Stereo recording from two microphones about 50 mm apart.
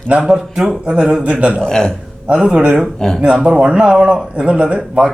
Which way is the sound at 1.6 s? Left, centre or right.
Centre.